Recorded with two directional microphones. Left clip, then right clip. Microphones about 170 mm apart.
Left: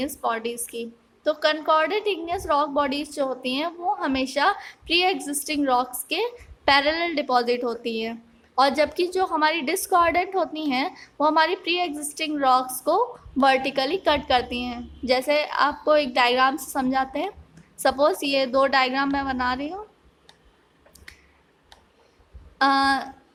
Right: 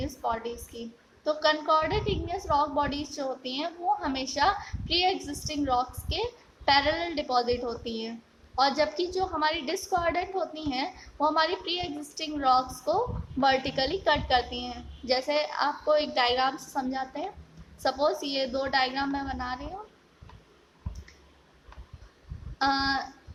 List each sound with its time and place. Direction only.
0.0 s a woman's voice: 45° left (ahead or behind)
22.5 s a woman's voice: 40° left (ahead or behind)